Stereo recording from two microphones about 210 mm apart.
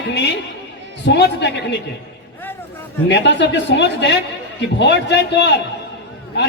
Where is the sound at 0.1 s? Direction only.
55° left (ahead or behind).